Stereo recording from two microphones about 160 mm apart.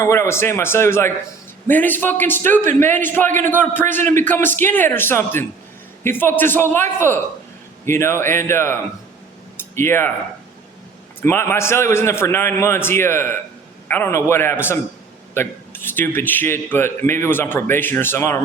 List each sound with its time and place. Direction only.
0.0 s a man's voice: 15° left (ahead or behind)
7.9 s a man's voice: 15° left (ahead or behind)
9.6 s a sound: 15° left (ahead or behind)
11.2 s a man's voice: 15° left (ahead or behind)